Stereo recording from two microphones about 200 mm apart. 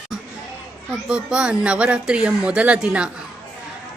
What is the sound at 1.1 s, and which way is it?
Speech, 5° right (ahead or behind).